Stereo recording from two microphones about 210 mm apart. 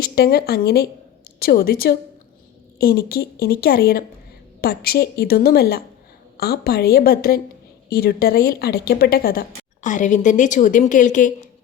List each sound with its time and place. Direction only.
0.0 s speech: 50° left (ahead or behind)